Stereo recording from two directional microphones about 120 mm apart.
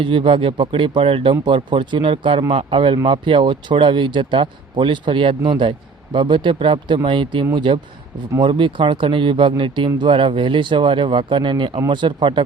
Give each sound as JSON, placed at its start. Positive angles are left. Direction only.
{"t": 0.0, "sound": "speech", "side_deg": -45}